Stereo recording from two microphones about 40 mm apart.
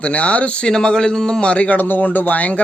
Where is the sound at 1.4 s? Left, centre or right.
Left.